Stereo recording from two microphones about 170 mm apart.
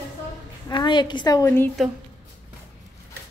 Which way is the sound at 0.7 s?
25° left (ahead or behind).